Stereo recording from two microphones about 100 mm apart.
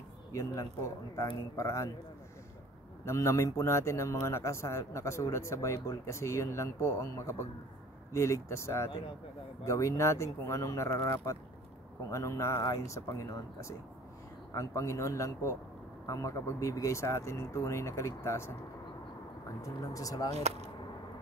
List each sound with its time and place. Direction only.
0.3 s a man's voice: 30° left (ahead or behind)
3.1 s a man's voice: 30° left (ahead or behind)
19.6 s a man's voice: 35° left (ahead or behind)
20.3 s speech: 90° right